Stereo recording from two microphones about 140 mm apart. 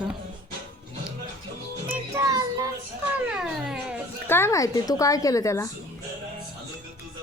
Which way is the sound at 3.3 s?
5° right (ahead or behind).